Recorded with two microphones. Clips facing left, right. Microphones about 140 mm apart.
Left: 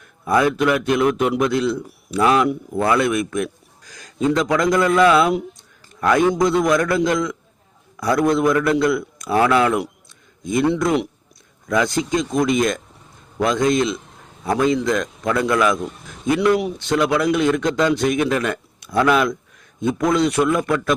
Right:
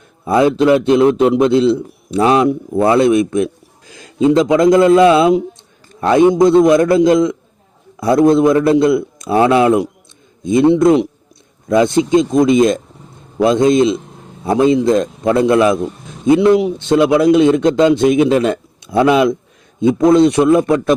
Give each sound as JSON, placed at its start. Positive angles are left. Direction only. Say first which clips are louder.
{"t": 0.3, "sound": "a man's voice", "louder": "right 6 dB", "side_deg": -25}
{"t": 16.0, "sound": "a sound", "louder": "right 7 dB", "side_deg": -25}
{"t": 16.6, "sound": "a man's voice", "louder": "right 7 dB", "side_deg": -15}